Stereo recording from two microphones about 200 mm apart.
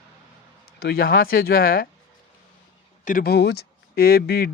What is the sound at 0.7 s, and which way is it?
Speech, 50° left (ahead or behind).